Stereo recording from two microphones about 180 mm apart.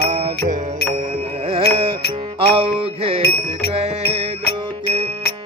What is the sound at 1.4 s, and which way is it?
Music, 30° right (ahead or behind).